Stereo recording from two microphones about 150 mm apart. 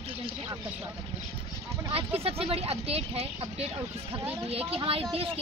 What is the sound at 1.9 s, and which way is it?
Speech, 40° right (ahead or behind).